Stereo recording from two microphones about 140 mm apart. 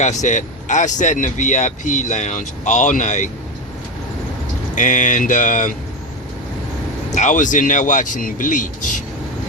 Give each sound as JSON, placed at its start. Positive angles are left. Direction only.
{"t": 0.0, "sound": "speech", "side_deg": 55}
{"t": 4.7, "sound": "speech", "side_deg": 65}
{"t": 7.1, "sound": "speech", "side_deg": 60}